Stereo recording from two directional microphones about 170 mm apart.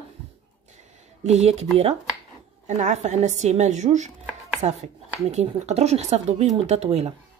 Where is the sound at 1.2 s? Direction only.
40° right (ahead or behind).